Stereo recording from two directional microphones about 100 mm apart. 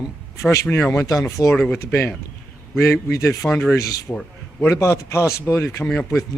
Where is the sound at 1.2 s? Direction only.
30° left (ahead or behind).